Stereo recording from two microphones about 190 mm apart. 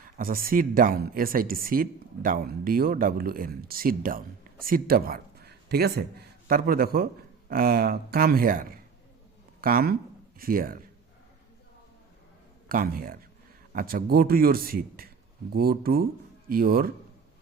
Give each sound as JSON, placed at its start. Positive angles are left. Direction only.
{"t": 0.2, "sound": "a man's voice", "side_deg": -50}
{"t": 12.6, "sound": "speech", "side_deg": -50}